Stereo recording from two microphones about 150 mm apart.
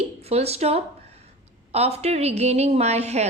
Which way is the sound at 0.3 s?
45° right (ahead or behind).